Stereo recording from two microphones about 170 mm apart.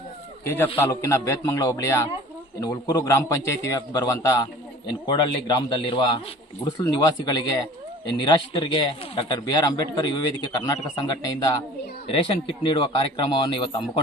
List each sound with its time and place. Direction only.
0.4 s a man's voice: 15° left (ahead or behind); by 14.0 s 30° left (ahead or behind)